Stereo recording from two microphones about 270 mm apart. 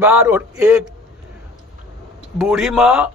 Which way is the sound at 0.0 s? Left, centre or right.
Centre.